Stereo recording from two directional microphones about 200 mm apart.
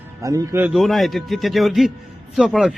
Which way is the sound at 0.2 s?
15° right (ahead or behind).